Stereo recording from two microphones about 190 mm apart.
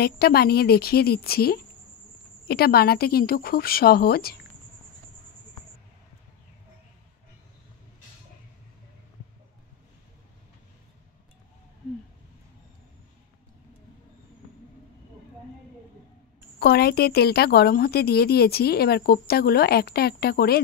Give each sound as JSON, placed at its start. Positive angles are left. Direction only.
{"t": 0.0, "sound": "a woman's voice", "side_deg": 55}
{"t": 16.5, "sound": "a woman's voice", "side_deg": 55}